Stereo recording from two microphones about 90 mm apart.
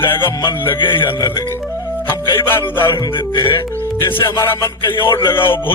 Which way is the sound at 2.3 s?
25° left (ahead or behind).